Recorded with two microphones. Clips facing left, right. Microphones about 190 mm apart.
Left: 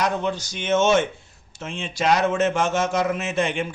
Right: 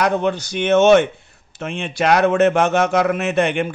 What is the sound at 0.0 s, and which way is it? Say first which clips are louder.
A man's voice: right 5 dB; 60° right (ahead or behind).